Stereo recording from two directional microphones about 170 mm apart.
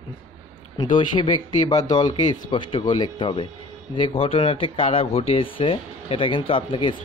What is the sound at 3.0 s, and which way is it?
Speech, 30° left (ahead or behind).